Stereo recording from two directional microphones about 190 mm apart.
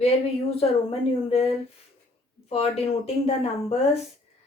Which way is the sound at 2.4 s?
30° left (ahead or behind).